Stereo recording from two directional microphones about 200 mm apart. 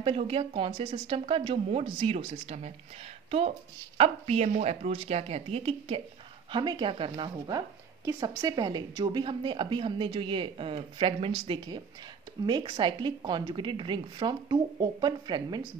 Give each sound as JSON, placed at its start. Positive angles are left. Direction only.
{"t": 0.0, "sound": "a woman's voice", "side_deg": -30}